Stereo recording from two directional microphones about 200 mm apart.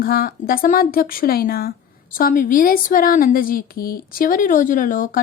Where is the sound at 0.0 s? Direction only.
50° left (ahead or behind).